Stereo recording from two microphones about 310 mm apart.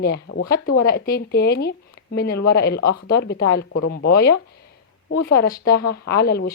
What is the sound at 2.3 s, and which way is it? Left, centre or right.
Speech, left.